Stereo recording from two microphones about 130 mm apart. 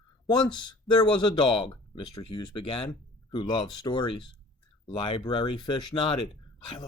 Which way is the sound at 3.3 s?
40° left (ahead or behind).